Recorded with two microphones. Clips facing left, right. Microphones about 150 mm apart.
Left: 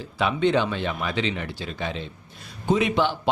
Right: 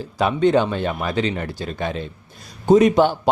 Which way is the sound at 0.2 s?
40° right (ahead or behind).